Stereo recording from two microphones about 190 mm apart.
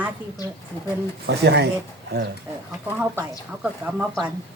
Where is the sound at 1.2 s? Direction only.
60° right (ahead or behind).